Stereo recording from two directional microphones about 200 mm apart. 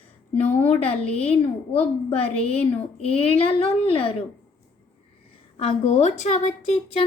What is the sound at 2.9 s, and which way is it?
Speech, 30° left (ahead or behind).